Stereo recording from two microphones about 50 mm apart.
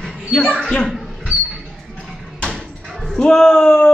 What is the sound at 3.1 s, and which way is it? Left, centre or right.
Speech, centre.